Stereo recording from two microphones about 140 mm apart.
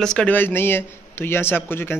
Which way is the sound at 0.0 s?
5° left (ahead or behind).